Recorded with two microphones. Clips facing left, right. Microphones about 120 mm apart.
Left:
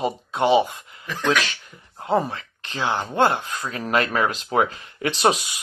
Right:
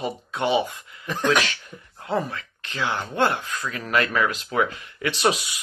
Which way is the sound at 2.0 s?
30° left (ahead or behind).